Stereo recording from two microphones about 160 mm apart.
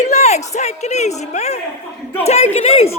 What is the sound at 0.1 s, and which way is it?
A man's voice, 45° left (ahead or behind).